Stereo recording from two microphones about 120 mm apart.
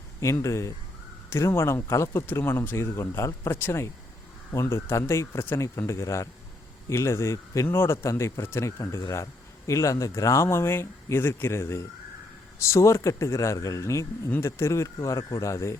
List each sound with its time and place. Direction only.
0.2 s speech: 25° left (ahead or behind)